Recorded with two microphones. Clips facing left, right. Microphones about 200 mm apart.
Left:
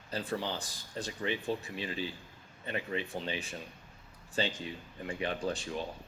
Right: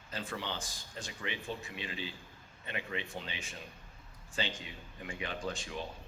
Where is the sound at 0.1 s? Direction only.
35° left (ahead or behind).